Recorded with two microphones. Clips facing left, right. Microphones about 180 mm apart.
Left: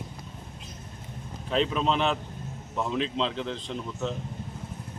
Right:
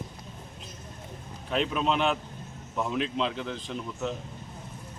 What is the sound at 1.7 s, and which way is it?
Speech, 5° right (ahead or behind).